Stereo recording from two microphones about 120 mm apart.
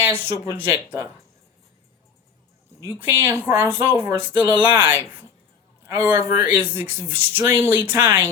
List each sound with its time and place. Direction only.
0.0 s speech: 15° right (ahead or behind)
2.8 s speech: 20° right (ahead or behind)